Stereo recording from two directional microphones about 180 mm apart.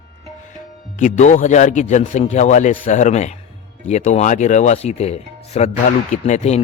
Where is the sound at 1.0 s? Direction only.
45° left (ahead or behind).